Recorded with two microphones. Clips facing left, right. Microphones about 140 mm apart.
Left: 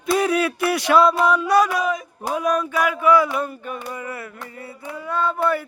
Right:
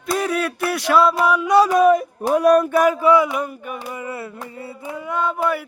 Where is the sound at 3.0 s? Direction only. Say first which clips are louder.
Right 1 dB; 20° right (ahead or behind).